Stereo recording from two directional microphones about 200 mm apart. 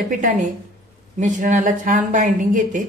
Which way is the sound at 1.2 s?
40° right (ahead or behind).